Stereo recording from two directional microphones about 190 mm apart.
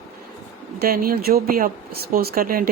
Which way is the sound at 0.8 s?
50° right (ahead or behind).